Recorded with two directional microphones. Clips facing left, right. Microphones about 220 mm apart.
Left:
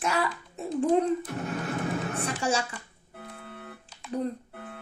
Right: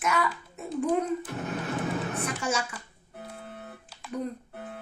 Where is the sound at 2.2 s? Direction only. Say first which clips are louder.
Left 5 dB; 30° left (ahead or behind).